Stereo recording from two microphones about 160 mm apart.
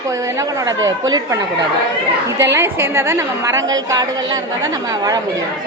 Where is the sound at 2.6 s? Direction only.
15° right (ahead or behind).